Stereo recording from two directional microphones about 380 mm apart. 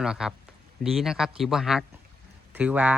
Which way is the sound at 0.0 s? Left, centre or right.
Centre.